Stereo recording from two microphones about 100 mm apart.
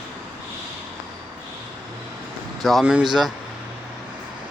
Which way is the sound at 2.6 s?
Centre (ahead or behind).